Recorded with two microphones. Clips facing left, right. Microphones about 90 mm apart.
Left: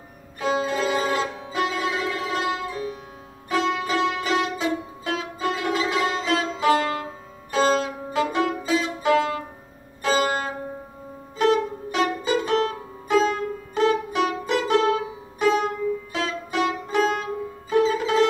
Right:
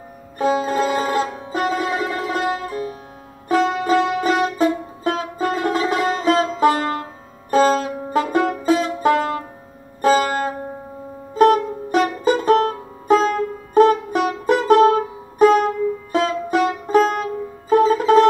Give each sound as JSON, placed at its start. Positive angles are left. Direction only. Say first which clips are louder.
{"t": 0.4, "sound": "sitar", "louder": "right 5 dB", "side_deg": -45}
{"t": 3.4, "sound": "music", "louder": "right 6 dB", "side_deg": -45}